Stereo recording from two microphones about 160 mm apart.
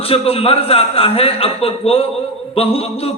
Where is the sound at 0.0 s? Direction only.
35° left (ahead or behind).